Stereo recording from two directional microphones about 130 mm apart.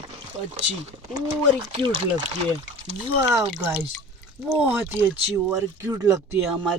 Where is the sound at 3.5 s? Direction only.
15° right (ahead or behind).